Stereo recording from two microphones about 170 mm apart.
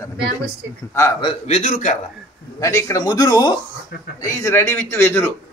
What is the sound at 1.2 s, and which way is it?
Speech, 40° left (ahead or behind).